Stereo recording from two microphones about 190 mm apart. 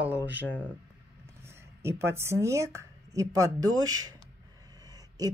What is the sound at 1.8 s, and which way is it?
Speech, 15° right (ahead or behind).